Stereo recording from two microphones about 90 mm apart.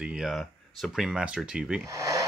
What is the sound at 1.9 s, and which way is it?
Speech, 35° right (ahead or behind).